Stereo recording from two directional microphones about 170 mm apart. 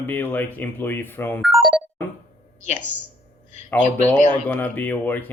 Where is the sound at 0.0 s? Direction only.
10° left (ahead or behind).